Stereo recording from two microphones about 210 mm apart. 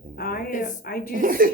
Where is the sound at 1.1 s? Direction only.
40° right (ahead or behind).